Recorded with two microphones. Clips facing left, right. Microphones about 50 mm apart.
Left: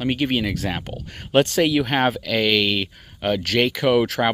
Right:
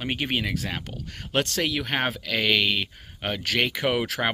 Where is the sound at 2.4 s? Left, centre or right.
Centre.